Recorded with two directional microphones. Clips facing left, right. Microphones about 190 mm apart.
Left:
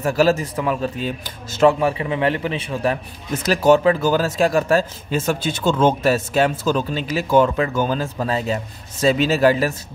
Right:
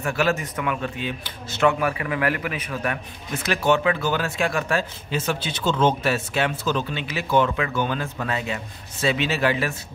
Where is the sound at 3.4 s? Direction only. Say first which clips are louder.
Left 6 dB; 40° left (ahead or behind).